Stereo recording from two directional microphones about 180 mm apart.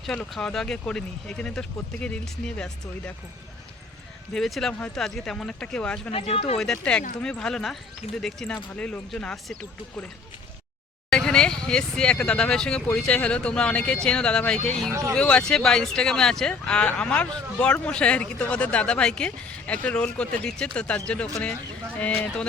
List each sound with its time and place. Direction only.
0.0 s speech: 5° left (ahead or behind)
4.4 s speech: centre (ahead or behind)
6.1 s speech: 30° left (ahead or behind)
6.6 s speech: 5° left (ahead or behind)
11.1 s speech: 5° left (ahead or behind)
14.8 s speech: 15° right (ahead or behind)
15.1 s speech: 5° left (ahead or behind)